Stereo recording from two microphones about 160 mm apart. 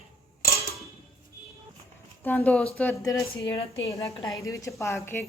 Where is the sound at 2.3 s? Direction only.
10° left (ahead or behind).